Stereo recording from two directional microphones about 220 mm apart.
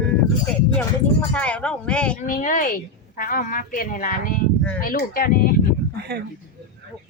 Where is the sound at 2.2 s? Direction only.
35° left (ahead or behind).